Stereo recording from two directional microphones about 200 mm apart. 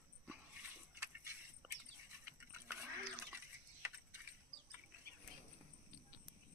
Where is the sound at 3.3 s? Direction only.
10° right (ahead or behind).